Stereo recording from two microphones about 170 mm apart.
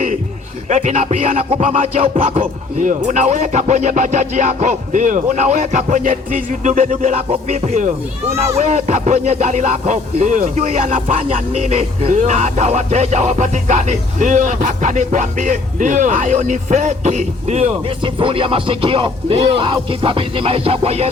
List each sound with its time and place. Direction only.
0.7 s music: 45° right (ahead or behind)